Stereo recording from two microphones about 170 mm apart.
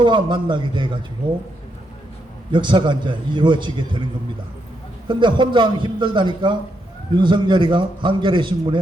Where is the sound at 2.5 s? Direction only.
25° right (ahead or behind).